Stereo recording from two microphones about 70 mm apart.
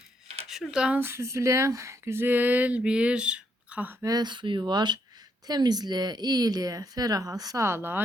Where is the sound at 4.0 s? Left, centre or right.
Right.